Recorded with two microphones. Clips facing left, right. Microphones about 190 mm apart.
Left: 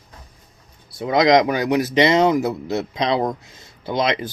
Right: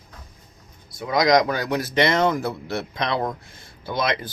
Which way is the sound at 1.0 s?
25° left (ahead or behind).